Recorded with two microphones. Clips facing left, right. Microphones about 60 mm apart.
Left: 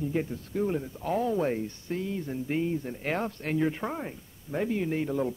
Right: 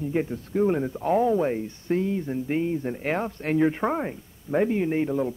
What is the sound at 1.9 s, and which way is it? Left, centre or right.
Speech, right.